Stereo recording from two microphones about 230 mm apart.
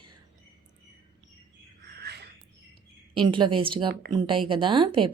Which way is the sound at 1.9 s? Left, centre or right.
Right.